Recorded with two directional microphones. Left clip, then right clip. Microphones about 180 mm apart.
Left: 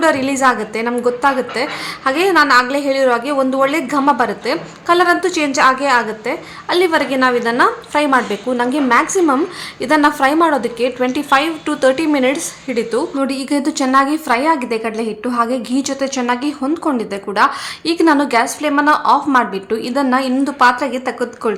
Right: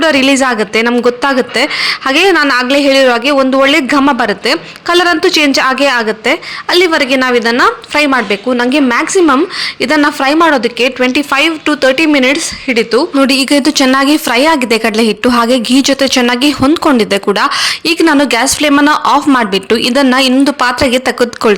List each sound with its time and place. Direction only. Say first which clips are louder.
0.0 s speech: right 4 dB; 30° right (ahead or behind)
17.6 s a woman's voice: right 6 dB; 25° right (ahead or behind)